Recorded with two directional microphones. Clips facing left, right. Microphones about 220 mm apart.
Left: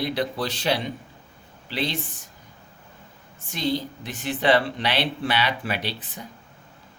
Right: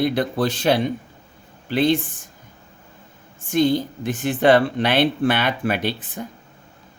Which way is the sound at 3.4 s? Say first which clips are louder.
Right 8 dB; 50° right (ahead or behind).